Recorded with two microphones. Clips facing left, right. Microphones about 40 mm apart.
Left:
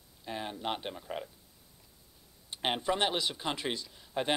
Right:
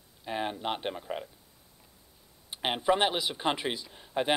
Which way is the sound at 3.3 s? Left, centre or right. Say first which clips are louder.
Right 6 dB; right.